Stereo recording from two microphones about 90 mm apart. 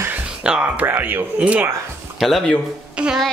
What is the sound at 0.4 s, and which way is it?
Speech, 10° right (ahead or behind).